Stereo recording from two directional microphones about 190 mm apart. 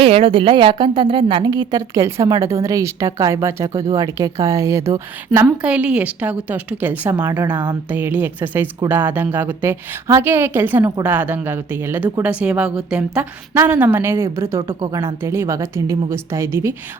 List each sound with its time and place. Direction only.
0.0 s a woman's voice: 30° right (ahead or behind); by 16.7 s 15° right (ahead or behind)